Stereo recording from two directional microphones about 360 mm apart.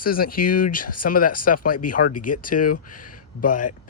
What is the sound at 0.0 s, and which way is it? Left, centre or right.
Speech, left.